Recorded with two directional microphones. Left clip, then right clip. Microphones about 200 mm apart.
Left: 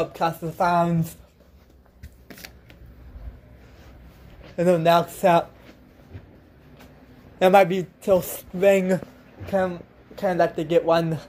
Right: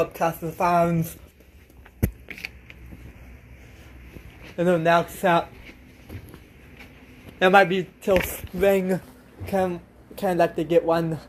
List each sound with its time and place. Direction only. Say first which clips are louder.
0.0 s speech: right 1 dB; centre (ahead or behind)
4.6 s speech: left 1 dB; 15° left (ahead or behind)
7.3 s a man's voice: left 1 dB; 20° left (ahead or behind)
8.1 s speech: left 1 dB; 5° left (ahead or behind)
9.5 s a woman's voice: left 1 dB; 15° right (ahead or behind)
10.5 s speech: left 1 dB; centre (ahead or behind)